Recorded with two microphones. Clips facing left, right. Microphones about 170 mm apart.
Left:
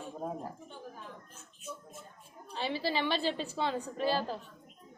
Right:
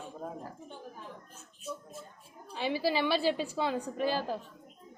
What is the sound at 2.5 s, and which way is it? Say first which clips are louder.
A woman's voice: right 3 dB; 10° right (ahead or behind).